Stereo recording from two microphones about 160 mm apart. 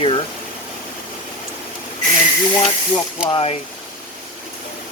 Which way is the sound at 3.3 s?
35° left (ahead or behind).